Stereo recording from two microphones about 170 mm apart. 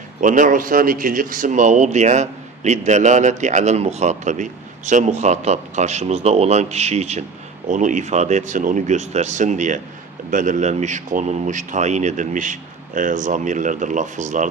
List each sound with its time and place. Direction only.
0.2 s speech: 50° right (ahead or behind)